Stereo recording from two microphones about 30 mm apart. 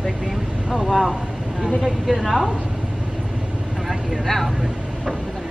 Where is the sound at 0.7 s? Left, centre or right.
Centre.